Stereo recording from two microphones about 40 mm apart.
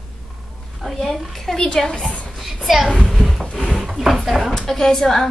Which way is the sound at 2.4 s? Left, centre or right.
Centre.